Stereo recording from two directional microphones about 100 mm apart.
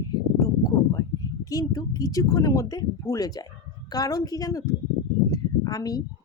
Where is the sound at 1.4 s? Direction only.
35° left (ahead or behind).